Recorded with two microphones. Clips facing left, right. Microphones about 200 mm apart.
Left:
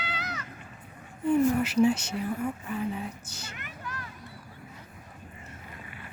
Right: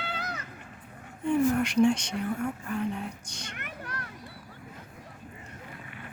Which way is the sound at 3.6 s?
65° right (ahead or behind).